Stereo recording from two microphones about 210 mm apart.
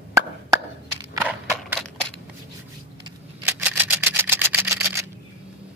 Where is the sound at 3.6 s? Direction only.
10° right (ahead or behind).